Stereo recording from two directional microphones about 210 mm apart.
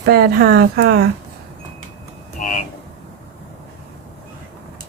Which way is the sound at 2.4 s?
40° left (ahead or behind).